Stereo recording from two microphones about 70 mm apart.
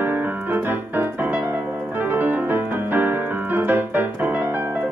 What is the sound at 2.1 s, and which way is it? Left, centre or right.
Keyboard, right.